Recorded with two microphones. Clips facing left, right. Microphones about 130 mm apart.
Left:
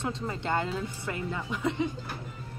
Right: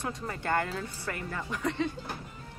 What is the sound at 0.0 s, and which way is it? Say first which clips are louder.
A woman's voice: left 2 dB; 20° left (ahead or behind).